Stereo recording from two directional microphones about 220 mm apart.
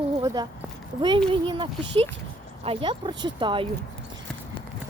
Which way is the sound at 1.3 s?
25° right (ahead or behind).